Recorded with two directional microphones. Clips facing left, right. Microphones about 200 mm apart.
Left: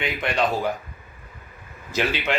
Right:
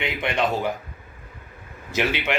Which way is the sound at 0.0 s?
25° right (ahead or behind).